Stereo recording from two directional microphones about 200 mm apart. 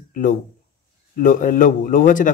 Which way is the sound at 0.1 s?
40° left (ahead or behind).